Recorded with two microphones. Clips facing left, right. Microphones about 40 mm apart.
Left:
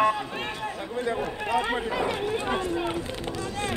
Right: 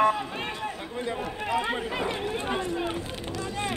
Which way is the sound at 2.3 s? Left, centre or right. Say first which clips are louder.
Left 2 dB; centre.